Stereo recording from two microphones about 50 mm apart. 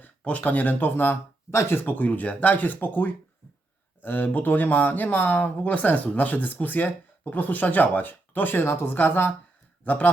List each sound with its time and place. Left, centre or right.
0.0 s speech: left
1.5 s speech: left
1.8 s speech: left
8.6 s speech: left
9.0 s speech: left
9.8 s speech: left